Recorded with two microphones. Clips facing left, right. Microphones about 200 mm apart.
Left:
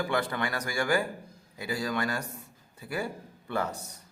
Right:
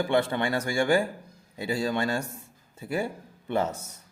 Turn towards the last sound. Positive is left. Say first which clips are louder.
# right 4 dB
turn(degrees=-25)  # may be behind; listen again after turning